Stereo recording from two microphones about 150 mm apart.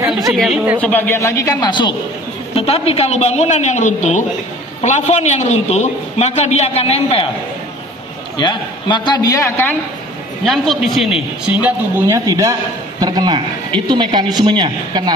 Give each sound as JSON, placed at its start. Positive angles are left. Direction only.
{"t": 0.3, "sound": "a woman's voice", "side_deg": -5}
{"t": 0.7, "sound": "a man's voice", "side_deg": 10}
{"t": 2.5, "sound": "a man's voice", "side_deg": 40}
{"t": 8.4, "sound": "a man's voice", "side_deg": 30}
{"t": 10.4, "sound": "a man's voice", "side_deg": 0}
{"t": 11.6, "sound": "a man's voice", "side_deg": -20}